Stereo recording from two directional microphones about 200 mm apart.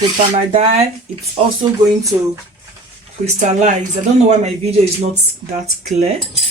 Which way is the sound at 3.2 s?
35° right (ahead or behind).